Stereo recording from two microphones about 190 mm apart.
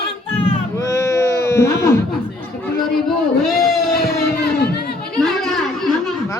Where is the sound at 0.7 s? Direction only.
15° left (ahead or behind).